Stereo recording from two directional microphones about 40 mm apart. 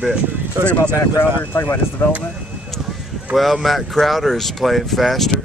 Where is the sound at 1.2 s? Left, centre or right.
Left.